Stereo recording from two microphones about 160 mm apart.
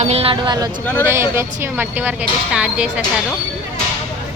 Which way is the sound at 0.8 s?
10° left (ahead or behind).